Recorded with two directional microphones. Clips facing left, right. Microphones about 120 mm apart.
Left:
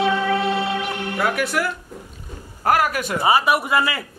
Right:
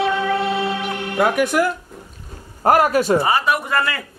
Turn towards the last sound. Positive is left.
turn(degrees=10)  # may be behind; listen again after turning